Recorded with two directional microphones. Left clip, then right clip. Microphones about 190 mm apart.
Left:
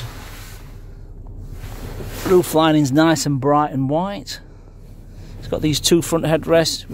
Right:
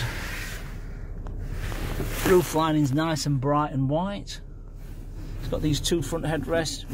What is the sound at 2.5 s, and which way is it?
Speech, 60° left (ahead or behind).